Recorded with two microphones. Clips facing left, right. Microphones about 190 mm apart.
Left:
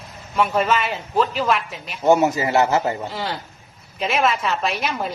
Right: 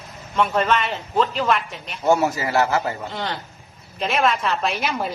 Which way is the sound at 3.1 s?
5° left (ahead or behind).